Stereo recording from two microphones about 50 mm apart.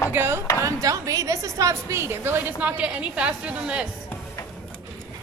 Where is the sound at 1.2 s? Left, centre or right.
Right.